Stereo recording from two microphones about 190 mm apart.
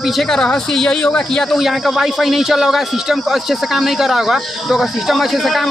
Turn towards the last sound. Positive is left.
turn(degrees=0)  # may be behind; listen again after turning